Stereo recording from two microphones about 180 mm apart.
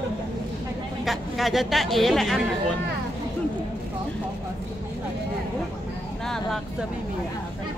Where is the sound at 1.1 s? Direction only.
Centre (ahead or behind).